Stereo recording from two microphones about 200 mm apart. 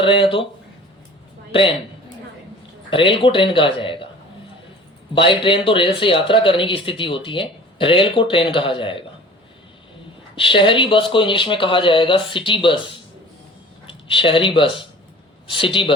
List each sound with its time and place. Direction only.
0.0 s speech: 25° left (ahead or behind)
2.9 s speech: 25° left (ahead or behind)
5.1 s speech: 25° left (ahead or behind)
10.3 s speech: 25° left (ahead or behind)